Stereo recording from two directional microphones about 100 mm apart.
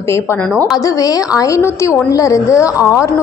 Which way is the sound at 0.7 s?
35° left (ahead or behind).